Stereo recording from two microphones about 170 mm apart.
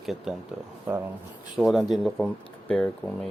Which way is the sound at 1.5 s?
Centre (ahead or behind).